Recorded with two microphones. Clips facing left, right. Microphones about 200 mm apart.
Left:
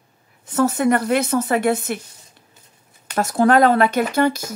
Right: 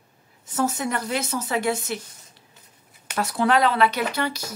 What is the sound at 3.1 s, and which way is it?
Speech, 45° left (ahead or behind).